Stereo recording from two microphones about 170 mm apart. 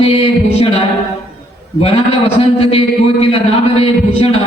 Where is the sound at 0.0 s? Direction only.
35° left (ahead or behind).